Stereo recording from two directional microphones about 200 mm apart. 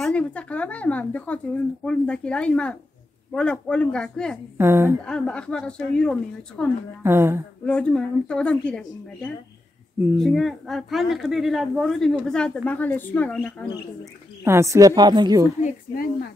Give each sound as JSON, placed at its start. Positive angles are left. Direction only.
{"t": 0.0, "sound": "a woman's voice", "side_deg": 5}
{"t": 4.6, "sound": "a woman's voice", "side_deg": -10}
{"t": 5.0, "sound": "a woman's voice", "side_deg": 5}
{"t": 7.0, "sound": "a woman's voice", "side_deg": -10}
{"t": 7.6, "sound": "a woman's voice", "side_deg": 5}
{"t": 14.4, "sound": "a woman's voice", "side_deg": -15}